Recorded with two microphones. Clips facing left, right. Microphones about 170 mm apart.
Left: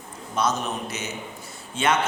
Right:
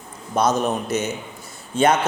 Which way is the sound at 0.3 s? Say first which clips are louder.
Right 6 dB; 40° right (ahead or behind).